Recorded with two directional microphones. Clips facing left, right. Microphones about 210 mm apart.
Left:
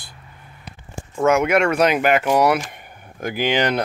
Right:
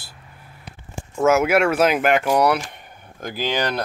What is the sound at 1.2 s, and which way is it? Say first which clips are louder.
Speech: even; 5° right (ahead or behind).